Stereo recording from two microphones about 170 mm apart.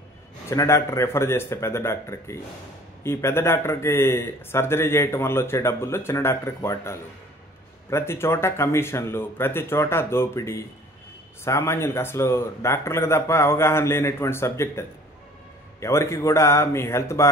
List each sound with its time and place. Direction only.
0.5 s speech: 15° left (ahead or behind)